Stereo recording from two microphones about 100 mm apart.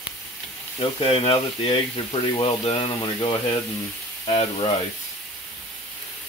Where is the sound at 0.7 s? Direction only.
70° left (ahead or behind).